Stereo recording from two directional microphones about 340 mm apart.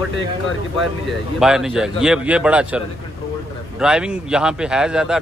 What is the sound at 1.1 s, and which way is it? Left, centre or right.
A man's voice, centre.